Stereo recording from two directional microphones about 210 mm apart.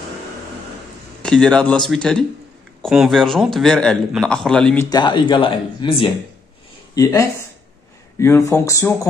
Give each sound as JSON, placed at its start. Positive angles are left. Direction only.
{"t": 1.2, "sound": "a man's voice", "side_deg": 5}
{"t": 4.8, "sound": "speech", "side_deg": 20}